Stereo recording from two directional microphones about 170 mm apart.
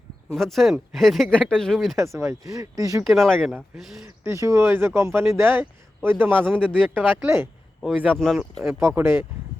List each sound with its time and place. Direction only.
0.3 s speech: centre (ahead or behind)
2.1 s speech: 20° right (ahead or behind)
3.0 s speech: centre (ahead or behind)
4.2 s speech: 15° right (ahead or behind)
7.8 s speech: centre (ahead or behind)
8.8 s speech: 15° right (ahead or behind)